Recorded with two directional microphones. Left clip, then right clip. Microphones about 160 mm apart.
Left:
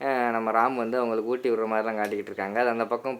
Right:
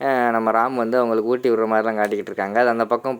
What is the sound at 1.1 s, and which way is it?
Speech, 45° right (ahead or behind).